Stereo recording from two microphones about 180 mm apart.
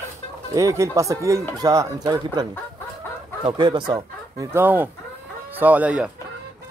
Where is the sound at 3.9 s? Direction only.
15° right (ahead or behind).